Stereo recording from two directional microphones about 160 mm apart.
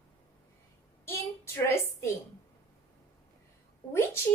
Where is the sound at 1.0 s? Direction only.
15° left (ahead or behind).